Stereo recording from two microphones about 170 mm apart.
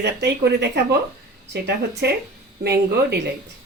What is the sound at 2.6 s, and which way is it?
Speech, 75° right (ahead or behind).